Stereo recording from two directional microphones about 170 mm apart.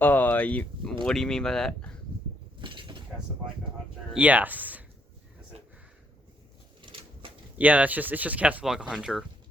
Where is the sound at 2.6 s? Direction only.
30° right (ahead or behind).